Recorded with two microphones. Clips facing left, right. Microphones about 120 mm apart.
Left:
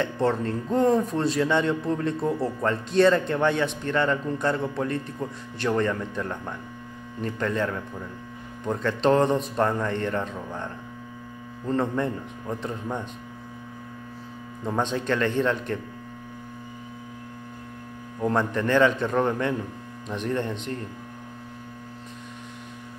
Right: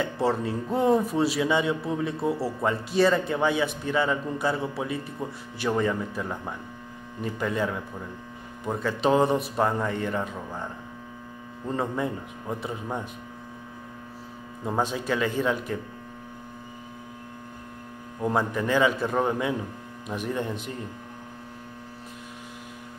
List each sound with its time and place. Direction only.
0.0 s a man's voice: 10° right (ahead or behind)
14.6 s a man's voice: 5° right (ahead or behind)
18.2 s a man's voice: 5° right (ahead or behind)